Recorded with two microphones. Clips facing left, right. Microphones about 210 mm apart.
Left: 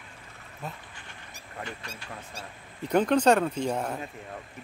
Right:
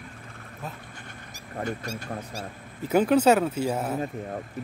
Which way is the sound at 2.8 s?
5° right (ahead or behind).